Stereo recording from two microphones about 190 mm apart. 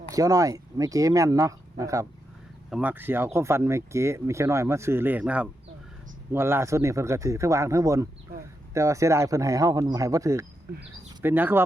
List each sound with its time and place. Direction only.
0.1 s speech: 20° right (ahead or behind)
2.6 s speech: 5° right (ahead or behind)